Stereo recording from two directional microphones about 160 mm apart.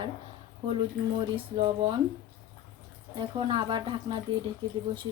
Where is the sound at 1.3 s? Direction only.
35° right (ahead or behind).